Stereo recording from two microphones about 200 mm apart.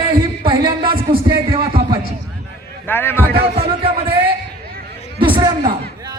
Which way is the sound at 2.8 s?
10° left (ahead or behind).